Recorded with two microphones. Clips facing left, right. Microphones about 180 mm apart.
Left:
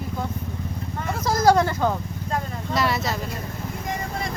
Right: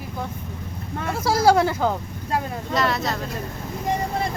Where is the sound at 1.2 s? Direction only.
10° right (ahead or behind).